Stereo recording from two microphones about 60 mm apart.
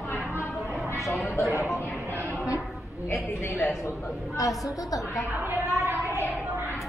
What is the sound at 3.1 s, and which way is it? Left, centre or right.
Speech, left.